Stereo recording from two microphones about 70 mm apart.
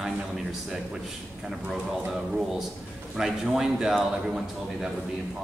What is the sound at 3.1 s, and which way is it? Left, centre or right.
A man's voice, centre.